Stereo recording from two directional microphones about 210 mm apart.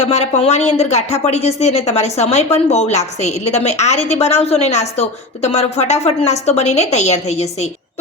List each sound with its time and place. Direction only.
0.0 s a woman's voice: 30° left (ahead or behind)